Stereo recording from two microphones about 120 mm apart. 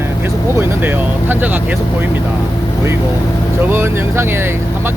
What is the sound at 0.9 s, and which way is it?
Speech, 15° right (ahead or behind).